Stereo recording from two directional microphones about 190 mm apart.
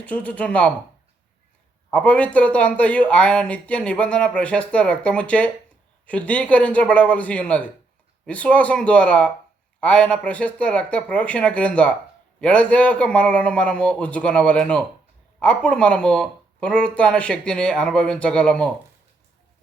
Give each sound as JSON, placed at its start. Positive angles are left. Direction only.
{"t": 0.0, "sound": "speech", "side_deg": 5}
{"t": 1.9, "sound": "speech", "side_deg": 5}